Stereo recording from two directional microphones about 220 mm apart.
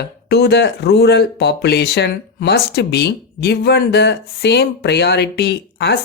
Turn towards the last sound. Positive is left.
turn(degrees=50)  # may be behind; listen again after turning